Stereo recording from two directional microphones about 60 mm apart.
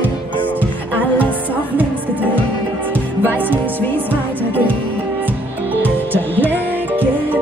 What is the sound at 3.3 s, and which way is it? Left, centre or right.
Music, right.